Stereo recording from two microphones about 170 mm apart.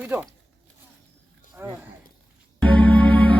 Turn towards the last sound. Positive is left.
turn(degrees=10)  # may be behind; listen again after turning